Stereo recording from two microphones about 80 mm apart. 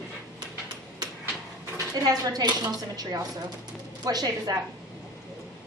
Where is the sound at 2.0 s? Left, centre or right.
Right.